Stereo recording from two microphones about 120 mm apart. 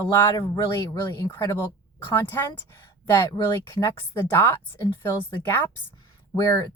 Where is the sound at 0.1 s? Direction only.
25° left (ahead or behind).